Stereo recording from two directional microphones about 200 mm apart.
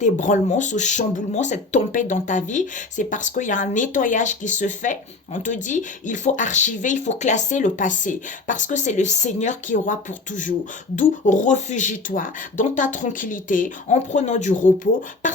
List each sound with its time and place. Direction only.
0.0 s speech: 40° left (ahead or behind)